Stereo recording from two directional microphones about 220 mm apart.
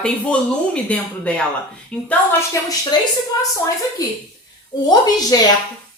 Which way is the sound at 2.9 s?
20° left (ahead or behind).